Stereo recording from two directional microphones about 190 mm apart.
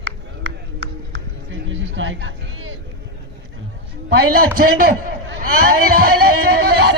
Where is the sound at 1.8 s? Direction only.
85° right.